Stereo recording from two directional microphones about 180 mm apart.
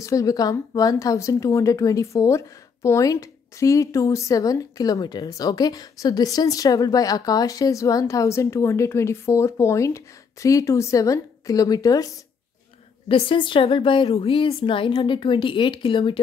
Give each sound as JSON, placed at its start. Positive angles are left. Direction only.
{"t": 0.0, "sound": "a woman's voice", "side_deg": 20}
{"t": 13.1, "sound": "a woman's voice", "side_deg": 30}